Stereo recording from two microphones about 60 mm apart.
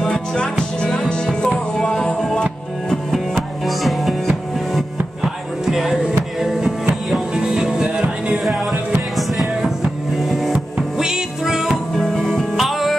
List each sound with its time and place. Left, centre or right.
0.0 s music: centre
3.1 s music: centre
5.2 s music: centre
9.1 s music: centre
12.0 s music: centre